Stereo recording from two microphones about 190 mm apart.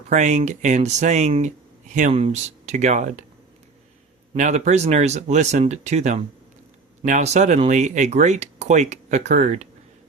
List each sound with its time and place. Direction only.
0.1 s speech: 40° right (ahead or behind)
4.4 s speech: 40° right (ahead or behind)